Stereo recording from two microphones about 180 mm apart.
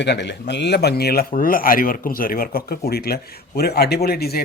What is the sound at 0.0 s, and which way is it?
A man's voice, 70° left (ahead or behind).